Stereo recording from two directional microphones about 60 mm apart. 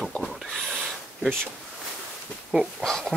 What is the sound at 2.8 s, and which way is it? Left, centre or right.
Speech, centre.